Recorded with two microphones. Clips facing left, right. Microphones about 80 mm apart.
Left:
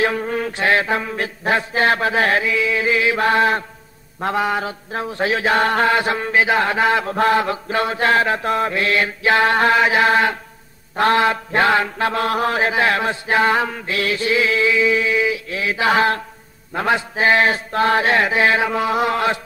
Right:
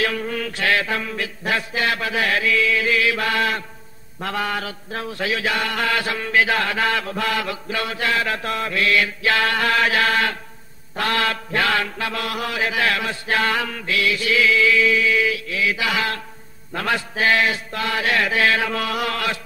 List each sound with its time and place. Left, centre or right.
0.0 s mantra: left